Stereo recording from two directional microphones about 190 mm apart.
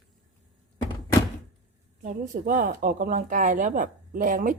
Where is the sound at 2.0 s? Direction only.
45° right (ahead or behind).